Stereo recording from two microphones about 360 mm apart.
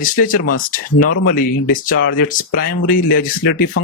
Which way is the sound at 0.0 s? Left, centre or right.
Left.